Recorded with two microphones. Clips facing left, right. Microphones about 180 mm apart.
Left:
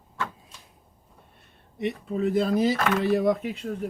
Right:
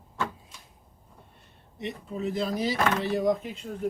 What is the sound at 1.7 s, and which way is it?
Speech, 60° left (ahead or behind).